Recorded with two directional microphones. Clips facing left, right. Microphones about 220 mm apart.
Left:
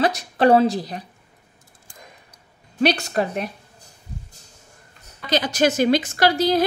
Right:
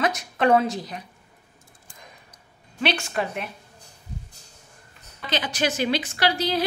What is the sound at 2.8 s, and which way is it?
Speech, 40° left (ahead or behind).